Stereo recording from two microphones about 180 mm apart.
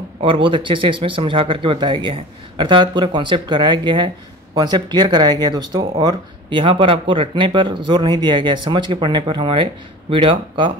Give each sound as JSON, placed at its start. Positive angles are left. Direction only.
{"t": 0.2, "sound": "speech", "side_deg": -30}